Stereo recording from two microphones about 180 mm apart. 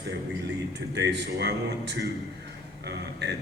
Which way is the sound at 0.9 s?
70° right (ahead or behind).